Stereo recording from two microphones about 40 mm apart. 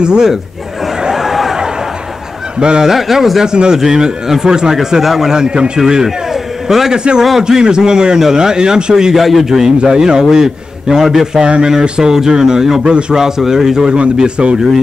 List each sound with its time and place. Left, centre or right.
0.0 s a man's voice: right
1.0 s a sound: centre
2.6 s a man's voice: right
2.9 s a man's voice: centre
3.5 s a man's voice: right
7.0 s a man's voice: right
8.9 s a man's voice: centre
9.8 s a man's voice: right
11.4 s a man's voice: right
11.8 s a man's voice: centre
14.1 s a man's voice: right